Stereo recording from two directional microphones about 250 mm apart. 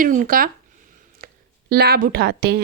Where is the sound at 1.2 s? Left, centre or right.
Right.